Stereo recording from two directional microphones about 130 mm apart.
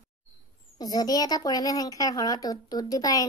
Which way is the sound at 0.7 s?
30° left (ahead or behind).